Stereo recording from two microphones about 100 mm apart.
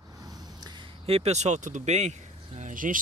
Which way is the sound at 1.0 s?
80° right.